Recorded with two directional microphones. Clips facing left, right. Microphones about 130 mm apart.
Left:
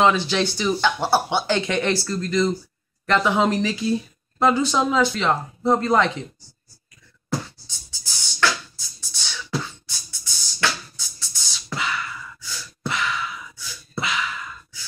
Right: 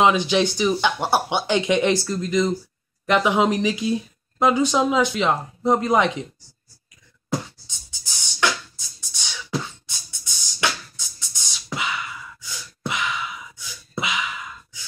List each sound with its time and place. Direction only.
0.0 s speech: 15° right (ahead or behind)
7.2 s music: 20° right (ahead or behind)
11.1 s a sound: 15° right (ahead or behind)